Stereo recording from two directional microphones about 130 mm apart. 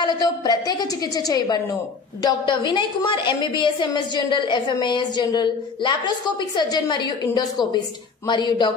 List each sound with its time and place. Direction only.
0.0 s a woman's voice: 35° left (ahead or behind)